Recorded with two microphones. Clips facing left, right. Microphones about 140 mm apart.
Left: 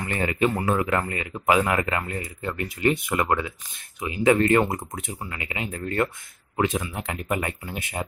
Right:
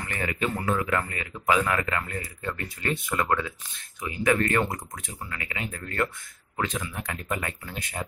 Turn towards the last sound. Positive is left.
turn(degrees=20)  # may be behind; listen again after turning